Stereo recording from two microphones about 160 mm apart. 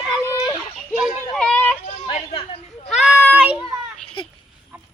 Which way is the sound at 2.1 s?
40° left (ahead or behind).